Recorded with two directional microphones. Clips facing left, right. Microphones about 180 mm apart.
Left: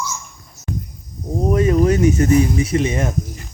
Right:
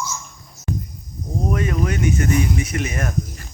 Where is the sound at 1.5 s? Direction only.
30° left (ahead or behind).